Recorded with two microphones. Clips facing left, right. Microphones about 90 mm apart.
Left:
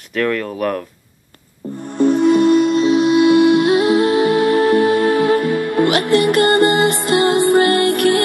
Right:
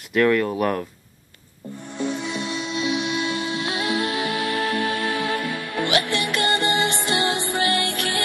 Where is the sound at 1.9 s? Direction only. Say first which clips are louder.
Left 15 dB; 50° left (ahead or behind).